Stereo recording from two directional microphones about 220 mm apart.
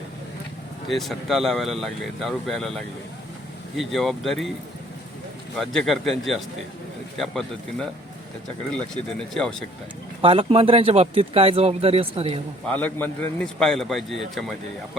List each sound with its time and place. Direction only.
0.9 s speech: centre (ahead or behind)
5.5 s speech: centre (ahead or behind)
9.1 s speech: 5° left (ahead or behind)
10.2 s speech: 25° right (ahead or behind)
12.6 s speech: 5° left (ahead or behind)